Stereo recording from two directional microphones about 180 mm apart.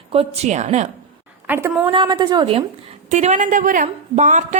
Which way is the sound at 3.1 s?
40° right (ahead or behind).